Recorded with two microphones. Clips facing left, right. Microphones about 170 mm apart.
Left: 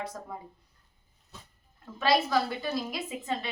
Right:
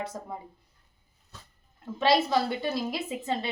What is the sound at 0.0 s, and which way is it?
Speech, 25° right (ahead or behind).